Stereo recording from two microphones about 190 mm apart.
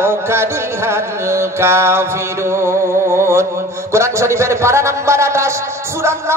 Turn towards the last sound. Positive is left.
turn(degrees=-15)  # may be behind; listen again after turning